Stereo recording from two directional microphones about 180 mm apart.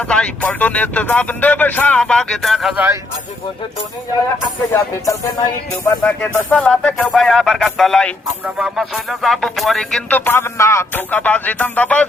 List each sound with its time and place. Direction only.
0.0 s speech: 5° left (ahead or behind); by 3.0 s 10° right (ahead or behind)
4.7 s speech: 20° left (ahead or behind)
6.0 s speech: 5° left (ahead or behind)